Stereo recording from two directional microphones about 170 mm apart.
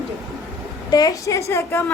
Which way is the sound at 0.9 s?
20° left (ahead or behind).